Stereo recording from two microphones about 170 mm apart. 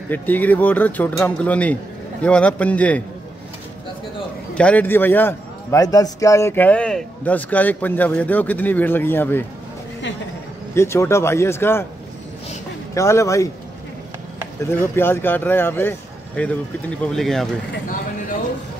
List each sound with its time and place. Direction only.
0.1 s a man's voice: 10° left (ahead or behind)
4.6 s a man's voice: 10° left (ahead or behind)
10.7 s a man's voice: 15° left (ahead or behind)
12.9 s a man's voice: 15° left (ahead or behind)
14.6 s a man's voice: 15° left (ahead or behind)